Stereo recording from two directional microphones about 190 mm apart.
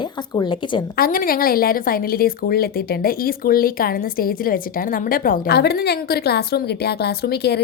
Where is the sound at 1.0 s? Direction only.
50° left (ahead or behind).